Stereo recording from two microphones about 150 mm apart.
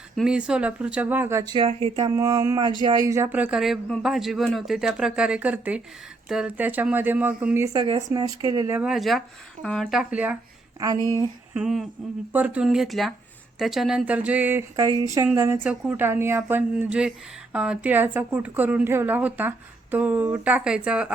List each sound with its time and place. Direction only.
0.2 s a woman's voice: 5° right (ahead or behind)
1.5 s speech: 35° right (ahead or behind)
2.0 s speech: 25° right (ahead or behind)
3.3 s a woman's voice: 5° right (ahead or behind)
7.6 s speech: 25° right (ahead or behind)
8.7 s speech: 5° right (ahead or behind)
10.8 s speech: 25° right (ahead or behind)
11.5 s a woman's voice: centre (ahead or behind)
14.8 s a woman's voice: 25° right (ahead or behind); by 21.1 s 5° right (ahead or behind)